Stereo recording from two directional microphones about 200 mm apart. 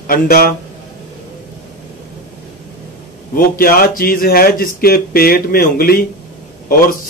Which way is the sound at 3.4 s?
45° left (ahead or behind).